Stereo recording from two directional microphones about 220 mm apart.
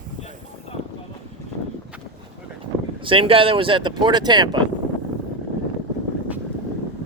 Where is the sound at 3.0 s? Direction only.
25° right (ahead or behind).